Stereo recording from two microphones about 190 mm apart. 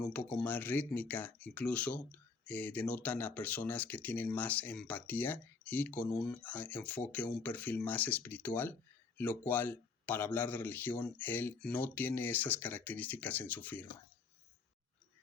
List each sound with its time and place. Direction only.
0.1 s speech: 10° left (ahead or behind)